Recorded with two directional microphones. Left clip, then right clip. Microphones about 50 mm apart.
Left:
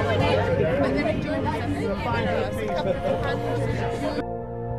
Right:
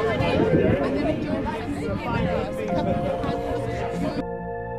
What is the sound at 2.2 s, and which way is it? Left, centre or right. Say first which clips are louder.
Speech: even; left.